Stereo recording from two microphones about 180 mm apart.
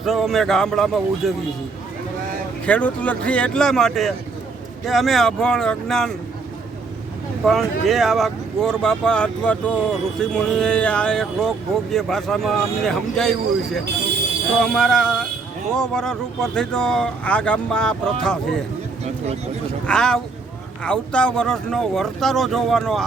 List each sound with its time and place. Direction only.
0.0 s speech: centre (ahead or behind)
2.6 s speech: 5° left (ahead or behind)
7.4 s speech: centre (ahead or behind)
14.6 s speech: 5° left (ahead or behind)
19.0 s speech: 35° right (ahead or behind)
19.9 s speech: 5° left (ahead or behind)